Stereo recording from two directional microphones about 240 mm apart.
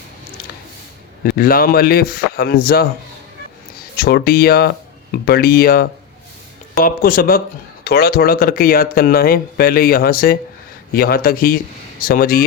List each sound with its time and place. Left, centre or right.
1.2 s speech: left
3.9 s speech: left